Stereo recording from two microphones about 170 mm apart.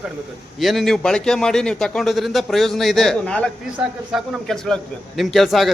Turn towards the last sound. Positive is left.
turn(degrees=0)  # may be behind; listen again after turning